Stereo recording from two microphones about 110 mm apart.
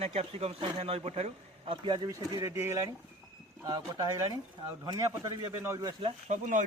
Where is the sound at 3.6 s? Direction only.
35° right (ahead or behind).